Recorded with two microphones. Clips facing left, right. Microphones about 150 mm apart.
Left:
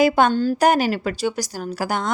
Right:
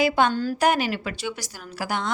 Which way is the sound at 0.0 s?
45° left (ahead or behind).